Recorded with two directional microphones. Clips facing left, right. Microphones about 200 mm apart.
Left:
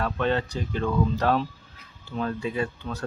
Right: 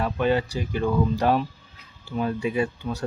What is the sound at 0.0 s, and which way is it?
Speech, 10° right (ahead or behind).